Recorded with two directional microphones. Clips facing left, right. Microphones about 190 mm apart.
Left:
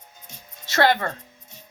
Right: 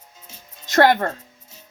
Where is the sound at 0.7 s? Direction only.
45° right (ahead or behind).